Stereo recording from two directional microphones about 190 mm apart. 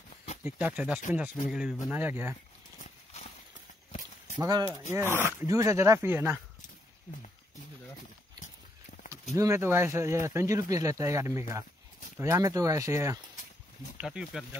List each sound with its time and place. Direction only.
0.4 s speech: 10° right (ahead or behind)
4.4 s speech: 20° right (ahead or behind)
9.3 s speech: 15° right (ahead or behind)
14.0 s speech: 5° right (ahead or behind)